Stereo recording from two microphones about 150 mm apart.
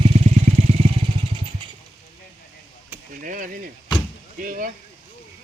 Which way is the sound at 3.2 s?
65° right (ahead or behind).